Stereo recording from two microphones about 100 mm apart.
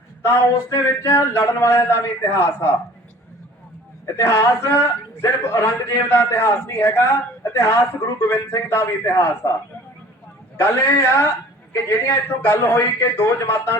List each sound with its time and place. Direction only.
0.2 s a man's voice: 25° left (ahead or behind)
4.0 s a man's voice: 25° left (ahead or behind)
10.6 s a man's voice: 25° left (ahead or behind)